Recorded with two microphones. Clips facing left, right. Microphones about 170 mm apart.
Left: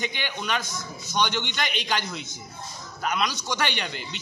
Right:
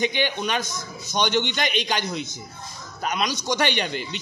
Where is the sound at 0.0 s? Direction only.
20° right (ahead or behind).